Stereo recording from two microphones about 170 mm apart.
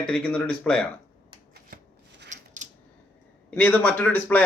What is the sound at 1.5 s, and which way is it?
Shuffling cards, 75° right (ahead or behind).